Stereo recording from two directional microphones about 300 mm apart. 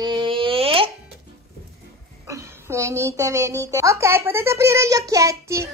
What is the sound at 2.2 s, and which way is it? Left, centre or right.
A woman's voice, centre.